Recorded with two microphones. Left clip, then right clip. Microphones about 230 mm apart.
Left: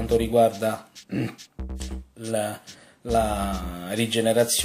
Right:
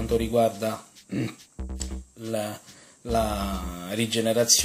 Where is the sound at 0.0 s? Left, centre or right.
Centre.